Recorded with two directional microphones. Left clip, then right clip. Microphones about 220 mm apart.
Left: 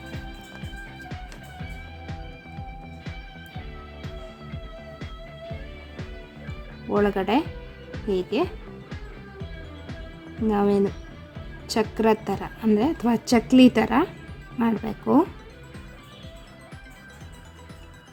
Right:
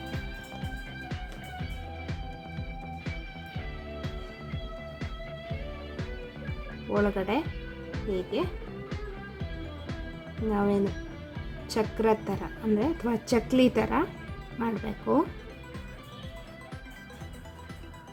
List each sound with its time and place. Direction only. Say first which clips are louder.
7.0 s a woman's voice: left 6 dB; 25° left (ahead or behind)
10.5 s a woman's voice: left 6 dB; 25° left (ahead or behind)